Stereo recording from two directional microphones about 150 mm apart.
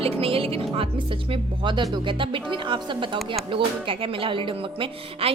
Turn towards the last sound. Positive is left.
turn(degrees=-40)  # may be behind; listen again after turning